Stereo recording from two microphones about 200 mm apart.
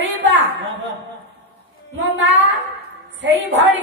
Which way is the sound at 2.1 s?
65° right (ahead or behind).